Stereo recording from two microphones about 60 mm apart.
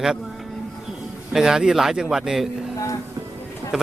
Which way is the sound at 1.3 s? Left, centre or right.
Centre.